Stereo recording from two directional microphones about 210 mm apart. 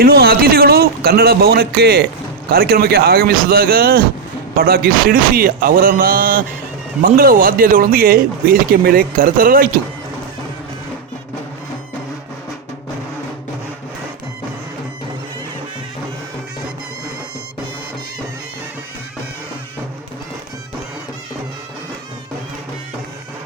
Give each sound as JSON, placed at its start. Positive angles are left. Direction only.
{"t": 0.0, "sound": "speech", "side_deg": -45}